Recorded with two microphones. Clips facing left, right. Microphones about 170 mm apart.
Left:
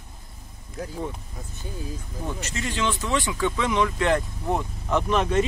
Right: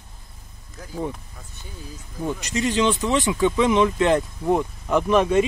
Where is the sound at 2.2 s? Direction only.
15° right (ahead or behind).